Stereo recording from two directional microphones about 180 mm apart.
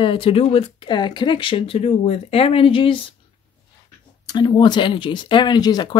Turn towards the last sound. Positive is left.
turn(degrees=25)  # may be behind; listen again after turning